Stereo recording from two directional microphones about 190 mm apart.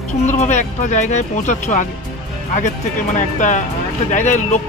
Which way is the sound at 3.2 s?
40° left (ahead or behind).